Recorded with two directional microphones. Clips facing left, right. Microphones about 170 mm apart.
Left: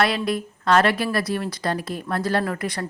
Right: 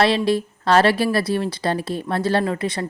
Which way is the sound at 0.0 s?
30° right (ahead or behind).